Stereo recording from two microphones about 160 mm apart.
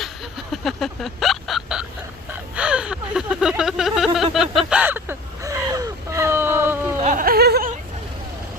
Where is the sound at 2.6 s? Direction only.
5° right (ahead or behind).